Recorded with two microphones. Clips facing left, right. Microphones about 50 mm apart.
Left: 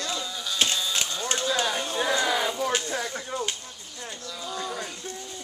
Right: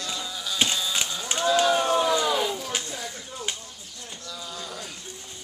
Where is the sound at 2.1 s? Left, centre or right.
Left.